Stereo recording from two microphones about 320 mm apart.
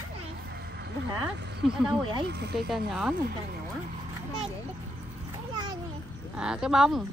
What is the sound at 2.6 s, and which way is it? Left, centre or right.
Speech, centre.